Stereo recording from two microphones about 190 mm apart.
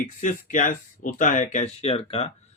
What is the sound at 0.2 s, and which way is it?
Speech, 40° left (ahead or behind).